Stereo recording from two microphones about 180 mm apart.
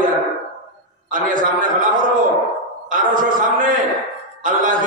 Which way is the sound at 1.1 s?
50° right (ahead or behind).